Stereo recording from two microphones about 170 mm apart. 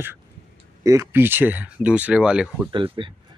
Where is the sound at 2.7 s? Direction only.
30° right (ahead or behind).